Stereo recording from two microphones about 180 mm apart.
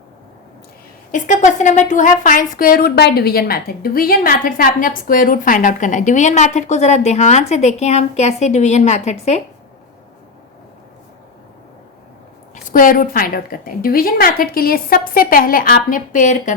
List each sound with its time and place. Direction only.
1.1 s a woman's voice: 45° left (ahead or behind)
12.6 s a woman's voice: 50° left (ahead or behind)